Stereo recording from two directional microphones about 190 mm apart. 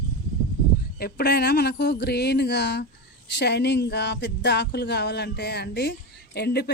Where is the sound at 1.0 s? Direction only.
55° left (ahead or behind).